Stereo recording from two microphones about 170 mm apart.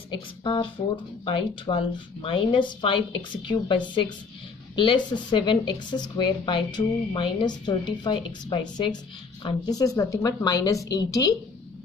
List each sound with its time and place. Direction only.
0.4 s a woman's voice: 30° left (ahead or behind)